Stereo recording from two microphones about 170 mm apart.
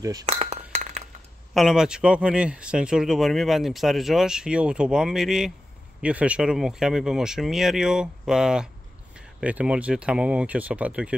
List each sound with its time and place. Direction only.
0.0 s speech: 20° right (ahead or behind)
0.3 s chink: 35° right (ahead or behind)
1.5 s speech: centre (ahead or behind)